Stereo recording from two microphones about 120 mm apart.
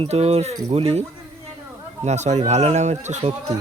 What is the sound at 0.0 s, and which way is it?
Speech, 60° right (ahead or behind).